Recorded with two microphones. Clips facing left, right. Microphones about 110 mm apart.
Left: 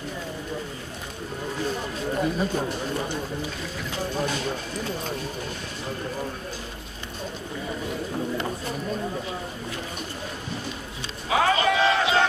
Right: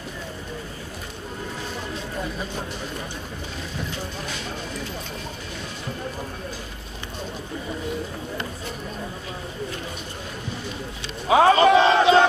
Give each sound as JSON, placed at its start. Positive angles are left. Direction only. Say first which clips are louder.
{"t": 11.2, "sound": "battle cry", "louder": "right 7 dB", "side_deg": -30}